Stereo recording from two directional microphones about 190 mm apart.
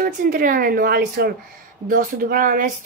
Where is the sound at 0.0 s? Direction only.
50° right (ahead or behind).